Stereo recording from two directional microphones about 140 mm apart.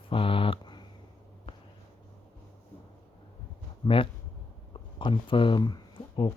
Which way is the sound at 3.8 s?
40° left (ahead or behind).